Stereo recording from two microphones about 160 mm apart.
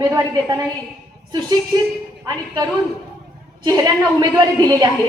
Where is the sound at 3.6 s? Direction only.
25° right (ahead or behind).